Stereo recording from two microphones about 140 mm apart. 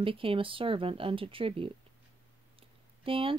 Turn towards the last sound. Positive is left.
turn(degrees=-40)  # may be behind; listen again after turning